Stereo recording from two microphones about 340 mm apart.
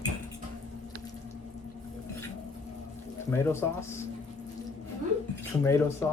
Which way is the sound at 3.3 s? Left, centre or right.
Centre.